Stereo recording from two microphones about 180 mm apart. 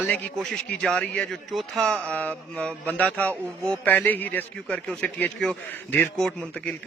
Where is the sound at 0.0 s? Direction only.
5° left (ahead or behind).